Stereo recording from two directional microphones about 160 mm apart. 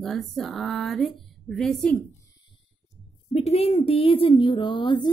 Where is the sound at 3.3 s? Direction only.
40° left (ahead or behind).